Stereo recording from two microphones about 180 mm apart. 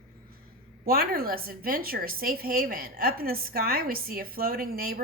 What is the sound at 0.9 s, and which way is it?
A woman's voice, 55° right (ahead or behind).